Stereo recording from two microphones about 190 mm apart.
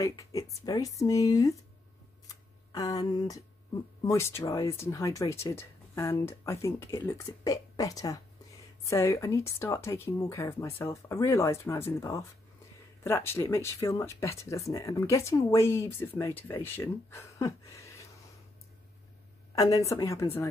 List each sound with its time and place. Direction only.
0.0 s speech: 20° left (ahead or behind)
19.5 s a woman's voice: 15° left (ahead or behind)